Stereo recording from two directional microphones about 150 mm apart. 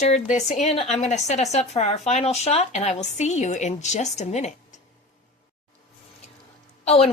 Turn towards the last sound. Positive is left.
turn(degrees=45)  # may be behind; listen again after turning